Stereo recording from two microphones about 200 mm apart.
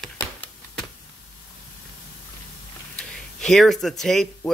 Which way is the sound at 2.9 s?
5° left (ahead or behind).